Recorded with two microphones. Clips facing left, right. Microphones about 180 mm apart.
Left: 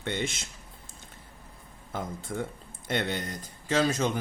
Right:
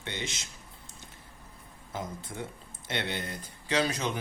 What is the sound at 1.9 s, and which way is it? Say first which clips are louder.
Speech: left 4 dB; 55° left (ahead or behind).